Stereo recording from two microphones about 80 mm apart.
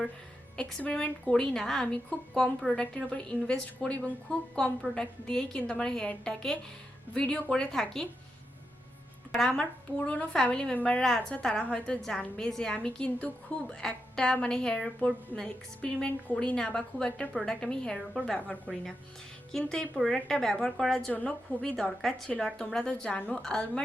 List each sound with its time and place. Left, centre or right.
0.5 s a woman's voice: centre
9.3 s a woman's voice: centre
21.1 s a woman's voice: centre
21.6 s a woman's voice: centre